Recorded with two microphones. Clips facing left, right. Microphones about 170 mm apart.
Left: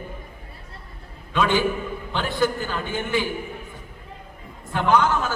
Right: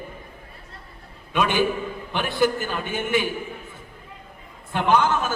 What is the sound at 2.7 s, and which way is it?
Speech, 20° right (ahead or behind).